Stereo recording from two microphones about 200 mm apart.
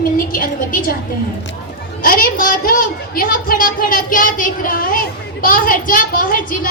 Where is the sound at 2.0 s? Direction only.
45° left (ahead or behind).